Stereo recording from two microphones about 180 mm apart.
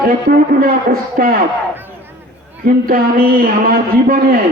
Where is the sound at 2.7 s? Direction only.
50° right (ahead or behind).